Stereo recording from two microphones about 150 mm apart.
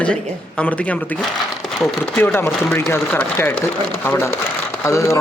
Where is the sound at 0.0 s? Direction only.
5° left (ahead or behind).